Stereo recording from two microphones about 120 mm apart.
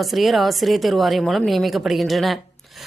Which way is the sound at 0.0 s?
Centre (ahead or behind).